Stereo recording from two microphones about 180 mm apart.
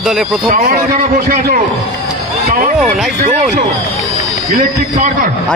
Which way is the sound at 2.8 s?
Centre (ahead or behind).